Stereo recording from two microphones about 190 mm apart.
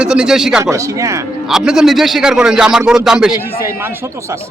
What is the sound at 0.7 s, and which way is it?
Speech, 15° right (ahead or behind).